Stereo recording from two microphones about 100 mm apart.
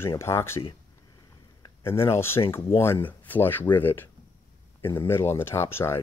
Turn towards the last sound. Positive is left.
turn(degrees=25)  # may be behind; listen again after turning